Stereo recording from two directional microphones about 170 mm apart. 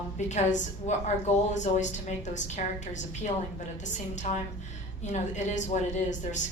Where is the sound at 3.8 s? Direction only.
45° left (ahead or behind).